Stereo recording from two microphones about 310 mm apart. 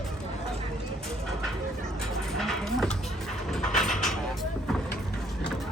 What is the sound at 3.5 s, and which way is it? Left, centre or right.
Vehicle, centre.